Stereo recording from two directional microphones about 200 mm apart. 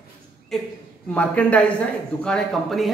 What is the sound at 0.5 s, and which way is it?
A man's voice, centre (ahead or behind).